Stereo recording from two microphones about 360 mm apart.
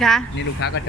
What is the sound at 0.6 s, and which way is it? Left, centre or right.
Speech, left.